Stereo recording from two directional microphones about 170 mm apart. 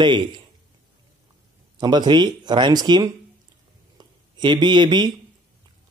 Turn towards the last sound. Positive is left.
turn(degrees=-25)  # may be behind; listen again after turning